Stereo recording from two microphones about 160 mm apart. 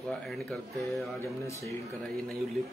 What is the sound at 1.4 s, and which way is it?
Speech, 20° left (ahead or behind).